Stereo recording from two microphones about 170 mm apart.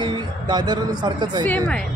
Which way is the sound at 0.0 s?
25° right (ahead or behind).